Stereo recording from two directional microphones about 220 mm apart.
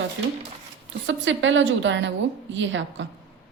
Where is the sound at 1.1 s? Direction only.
55° right (ahead or behind).